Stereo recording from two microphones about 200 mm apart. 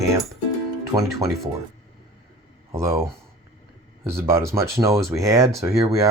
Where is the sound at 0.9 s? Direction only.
15° right (ahead or behind).